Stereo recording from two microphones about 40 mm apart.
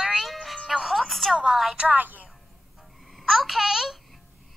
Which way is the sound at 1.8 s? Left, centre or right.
Right.